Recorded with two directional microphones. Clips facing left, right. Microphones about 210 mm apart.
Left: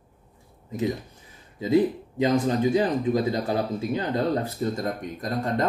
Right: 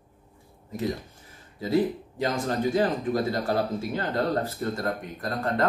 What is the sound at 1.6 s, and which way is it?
Speech, 15° left (ahead or behind).